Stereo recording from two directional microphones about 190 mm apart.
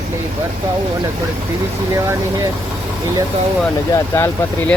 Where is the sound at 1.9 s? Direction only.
15° right (ahead or behind).